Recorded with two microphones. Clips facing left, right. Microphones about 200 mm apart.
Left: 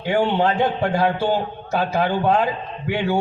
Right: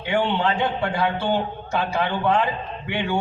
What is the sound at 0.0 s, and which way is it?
A man's voice, 40° left (ahead or behind).